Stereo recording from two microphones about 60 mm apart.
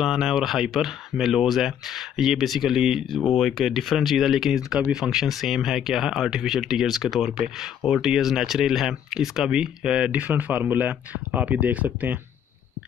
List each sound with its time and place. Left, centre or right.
0.0 s speech: centre
3.2 s speech: centre
10.2 s speech: right